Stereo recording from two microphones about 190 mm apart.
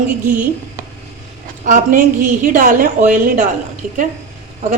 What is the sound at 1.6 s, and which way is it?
A woman's voice, 45° right (ahead or behind).